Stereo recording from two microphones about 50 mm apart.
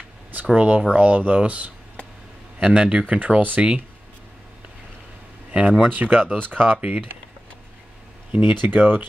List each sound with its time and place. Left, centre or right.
0.6 s speech: right
5.5 s speech: right
8.3 s speech: right
8.6 s speech: right